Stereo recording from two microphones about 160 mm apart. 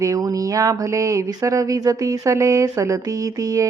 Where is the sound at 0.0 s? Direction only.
20° right (ahead or behind).